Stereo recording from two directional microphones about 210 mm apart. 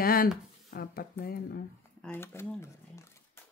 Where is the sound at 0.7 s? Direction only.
45° left (ahead or behind).